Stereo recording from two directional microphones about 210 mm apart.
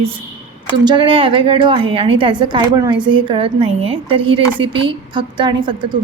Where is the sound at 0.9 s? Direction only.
25° right (ahead or behind).